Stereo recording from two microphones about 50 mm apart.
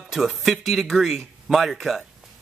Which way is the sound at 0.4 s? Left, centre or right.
Centre.